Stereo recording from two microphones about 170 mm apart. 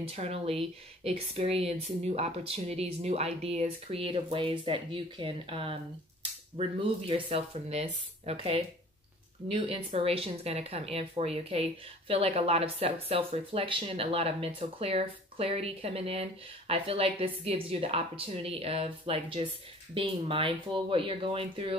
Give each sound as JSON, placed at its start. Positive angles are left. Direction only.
{"t": 0.1, "sound": "speech", "side_deg": -35}